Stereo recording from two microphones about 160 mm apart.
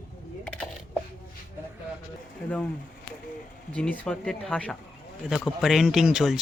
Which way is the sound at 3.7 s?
10° left (ahead or behind).